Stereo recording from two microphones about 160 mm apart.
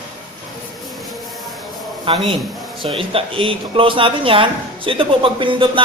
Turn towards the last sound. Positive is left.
turn(degrees=-30)  # may be behind; listen again after turning